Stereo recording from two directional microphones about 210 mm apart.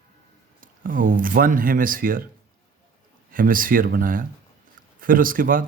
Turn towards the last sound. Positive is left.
turn(degrees=-40)  # may be behind; listen again after turning